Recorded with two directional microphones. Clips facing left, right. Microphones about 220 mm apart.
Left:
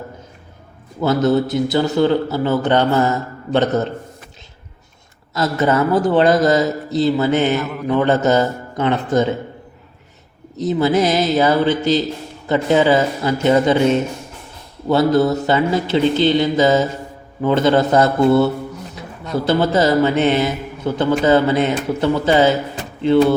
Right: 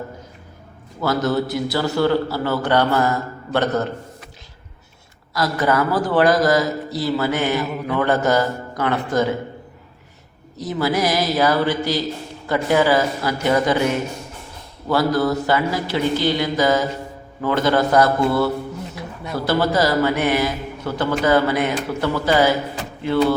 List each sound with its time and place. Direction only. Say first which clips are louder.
1.0 s a man's voice: left 4 dB; 20° left (ahead or behind)
5.3 s a man's voice: left 3 dB; 25° left (ahead or behind)
10.6 s a man's voice: left 5 dB; 20° left (ahead or behind)